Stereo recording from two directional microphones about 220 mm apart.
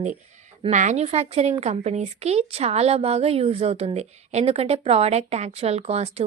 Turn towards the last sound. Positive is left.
turn(degrees=-30)  # may be behind; listen again after turning